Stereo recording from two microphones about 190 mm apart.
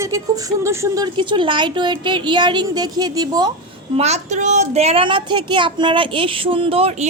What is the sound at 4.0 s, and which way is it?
A woman's voice, 35° right (ahead or behind).